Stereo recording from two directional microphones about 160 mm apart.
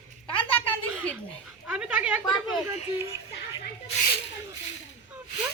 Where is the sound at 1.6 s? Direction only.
5° right (ahead or behind).